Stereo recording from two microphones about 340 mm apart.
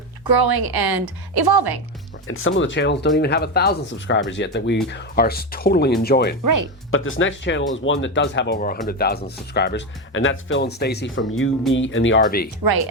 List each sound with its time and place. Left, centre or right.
0.3 s speech: right
2.2 s speech: left
6.4 s speech: right
6.9 s speech: left